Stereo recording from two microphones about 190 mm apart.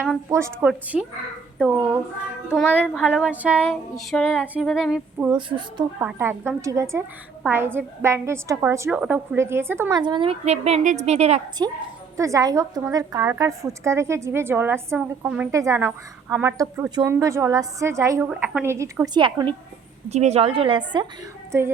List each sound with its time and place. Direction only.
0.3 s a woman's voice: 15° right (ahead or behind)
2.8 s female singing: centre (ahead or behind)
5.3 s a woman's voice: 25° right (ahead or behind)
6.0 s a woman's voice: 10° right (ahead or behind)
10.0 s a woman's voice: 25° right (ahead or behind)
11.6 s a woman's voice: 25° right (ahead or behind)
20.1 s a woman's voice: 35° right (ahead or behind)